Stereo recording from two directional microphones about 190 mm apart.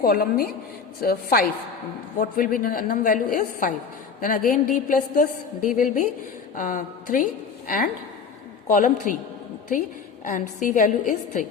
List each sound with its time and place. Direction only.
0.0 s a woman's voice: 50° left (ahead or behind)
8.7 s a woman's voice: 40° left (ahead or behind)
10.2 s a woman's voice: 45° left (ahead or behind)